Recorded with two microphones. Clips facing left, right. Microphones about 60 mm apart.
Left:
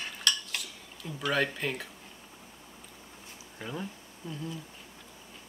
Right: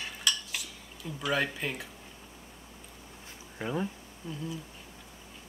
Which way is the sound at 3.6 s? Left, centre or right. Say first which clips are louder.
Right 5 dB; centre.